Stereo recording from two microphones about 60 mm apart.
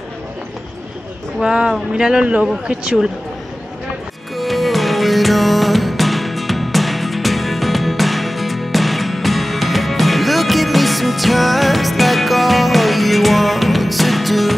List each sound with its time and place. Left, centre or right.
1.4 s speech: centre
4.4 s music: centre